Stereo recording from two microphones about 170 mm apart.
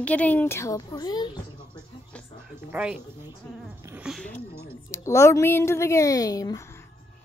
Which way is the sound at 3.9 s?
5° right (ahead or behind).